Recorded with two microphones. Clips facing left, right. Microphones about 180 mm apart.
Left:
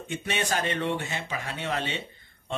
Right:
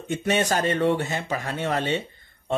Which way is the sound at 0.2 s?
40° right (ahead or behind).